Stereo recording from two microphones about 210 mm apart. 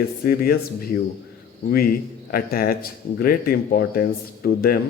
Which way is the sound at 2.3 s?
45° left (ahead or behind).